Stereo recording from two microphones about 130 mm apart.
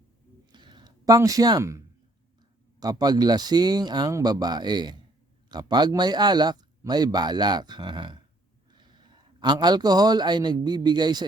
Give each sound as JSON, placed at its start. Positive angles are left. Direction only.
{"t": 0.5, "sound": "a sound", "side_deg": -35}
{"t": 2.8, "sound": "speech", "side_deg": -30}
{"t": 9.4, "sound": "speech", "side_deg": -35}